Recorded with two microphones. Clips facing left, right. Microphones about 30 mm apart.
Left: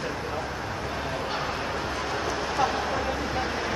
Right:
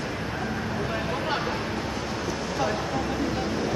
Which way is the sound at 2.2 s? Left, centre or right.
Centre.